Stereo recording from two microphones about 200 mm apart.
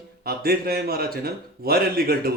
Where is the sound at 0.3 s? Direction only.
50° right (ahead or behind).